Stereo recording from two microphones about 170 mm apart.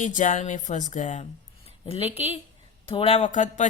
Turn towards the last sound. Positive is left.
turn(degrees=45)  # may be behind; listen again after turning